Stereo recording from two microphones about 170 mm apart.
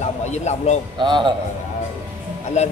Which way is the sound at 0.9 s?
25° right (ahead or behind).